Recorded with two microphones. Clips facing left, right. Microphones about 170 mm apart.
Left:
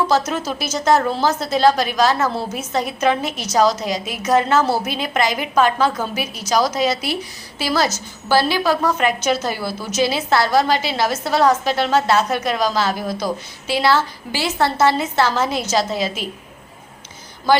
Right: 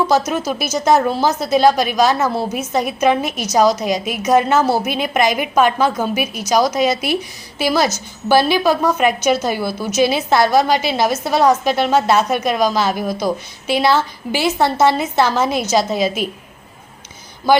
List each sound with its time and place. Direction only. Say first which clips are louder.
0.3 s a woman's voice: right 3 dB; 10° right (ahead or behind)